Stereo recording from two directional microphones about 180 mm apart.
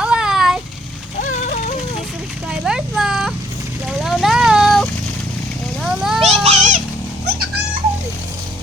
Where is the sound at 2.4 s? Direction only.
5° right (ahead or behind).